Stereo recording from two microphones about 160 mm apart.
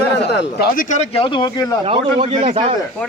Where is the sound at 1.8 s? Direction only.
35° right (ahead or behind).